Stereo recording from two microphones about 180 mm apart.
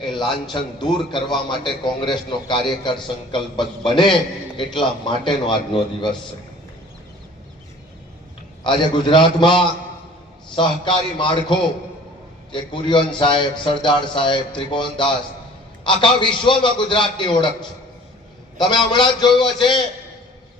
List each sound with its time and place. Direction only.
0.5 s a man's voice: 25° left (ahead or behind)
8.6 s a man's voice: 25° left (ahead or behind)
18.5 s a man's voice: 25° left (ahead or behind)